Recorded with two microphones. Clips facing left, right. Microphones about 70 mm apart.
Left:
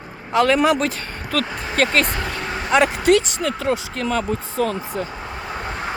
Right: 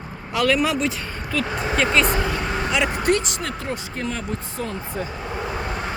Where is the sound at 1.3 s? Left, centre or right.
Left.